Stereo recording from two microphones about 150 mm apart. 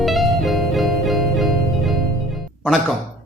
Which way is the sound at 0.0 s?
Centre (ahead or behind).